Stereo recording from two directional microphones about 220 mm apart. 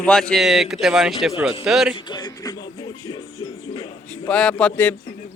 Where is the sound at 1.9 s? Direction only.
20° left (ahead or behind).